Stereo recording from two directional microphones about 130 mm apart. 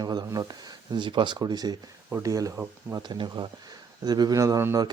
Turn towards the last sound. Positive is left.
turn(degrees=-25)  # may be behind; listen again after turning